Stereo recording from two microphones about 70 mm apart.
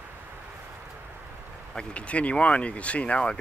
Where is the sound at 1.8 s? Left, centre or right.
Centre.